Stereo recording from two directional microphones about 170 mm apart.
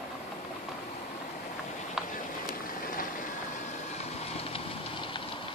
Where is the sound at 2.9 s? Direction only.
55° left (ahead or behind).